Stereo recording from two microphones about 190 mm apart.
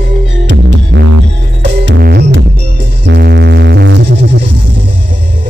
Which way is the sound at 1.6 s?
70° right (ahead or behind).